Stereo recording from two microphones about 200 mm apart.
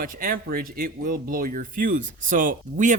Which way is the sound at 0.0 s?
45° right (ahead or behind).